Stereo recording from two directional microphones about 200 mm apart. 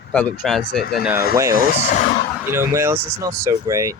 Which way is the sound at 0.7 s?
50° left (ahead or behind).